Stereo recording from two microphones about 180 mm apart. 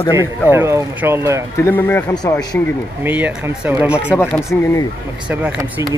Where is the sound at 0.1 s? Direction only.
15° right (ahead or behind).